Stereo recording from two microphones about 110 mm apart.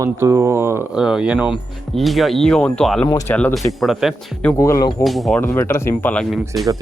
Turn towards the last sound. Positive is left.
turn(degrees=0)  # may be behind; listen again after turning